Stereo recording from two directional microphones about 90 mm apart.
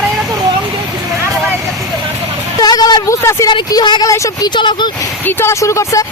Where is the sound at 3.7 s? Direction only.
50° left (ahead or behind).